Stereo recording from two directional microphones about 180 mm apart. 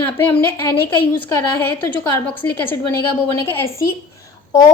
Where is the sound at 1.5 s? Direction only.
10° left (ahead or behind).